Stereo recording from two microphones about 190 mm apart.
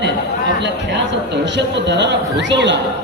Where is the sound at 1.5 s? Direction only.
65° right (ahead or behind).